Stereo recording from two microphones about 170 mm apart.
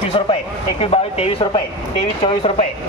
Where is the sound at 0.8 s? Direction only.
35° left (ahead or behind).